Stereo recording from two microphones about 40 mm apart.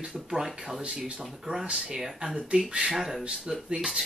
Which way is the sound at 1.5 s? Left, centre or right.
Centre.